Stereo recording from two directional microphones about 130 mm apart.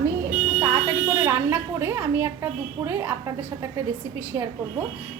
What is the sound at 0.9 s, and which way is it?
A woman's voice, 25° right (ahead or behind).